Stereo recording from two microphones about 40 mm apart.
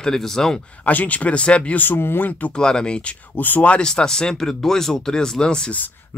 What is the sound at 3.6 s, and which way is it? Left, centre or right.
Speech, left.